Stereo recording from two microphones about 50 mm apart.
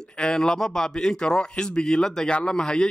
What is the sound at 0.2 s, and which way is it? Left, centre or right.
Speech, centre.